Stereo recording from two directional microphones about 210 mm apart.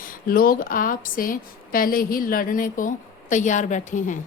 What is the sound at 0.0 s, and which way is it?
A woman's voice, 45° left (ahead or behind).